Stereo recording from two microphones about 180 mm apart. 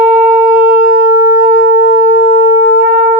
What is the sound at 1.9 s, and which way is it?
Sine wave, 45° left (ahead or behind).